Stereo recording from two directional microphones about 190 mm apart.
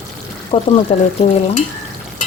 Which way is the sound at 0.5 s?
30° left (ahead or behind).